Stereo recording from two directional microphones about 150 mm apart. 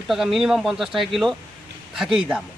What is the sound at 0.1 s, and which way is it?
A man's voice, 5° right (ahead or behind).